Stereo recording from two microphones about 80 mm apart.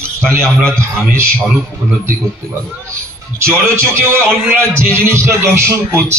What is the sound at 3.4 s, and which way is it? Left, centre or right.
Speech, centre.